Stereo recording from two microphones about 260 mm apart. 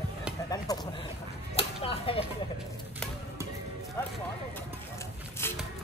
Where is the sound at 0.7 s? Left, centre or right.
Centre.